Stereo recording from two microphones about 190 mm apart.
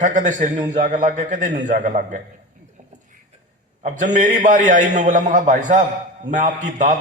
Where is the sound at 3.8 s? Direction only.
40° right (ahead or behind).